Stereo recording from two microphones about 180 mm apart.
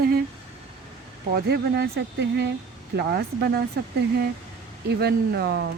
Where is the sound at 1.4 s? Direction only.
65° right (ahead or behind).